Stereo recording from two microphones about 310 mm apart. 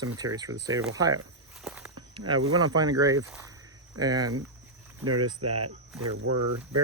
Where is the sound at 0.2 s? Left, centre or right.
Centre.